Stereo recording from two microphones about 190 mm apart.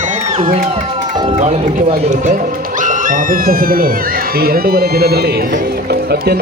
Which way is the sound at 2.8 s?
45° right (ahead or behind).